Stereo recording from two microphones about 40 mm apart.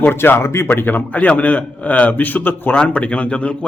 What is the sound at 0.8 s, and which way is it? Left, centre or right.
A man's voice, left.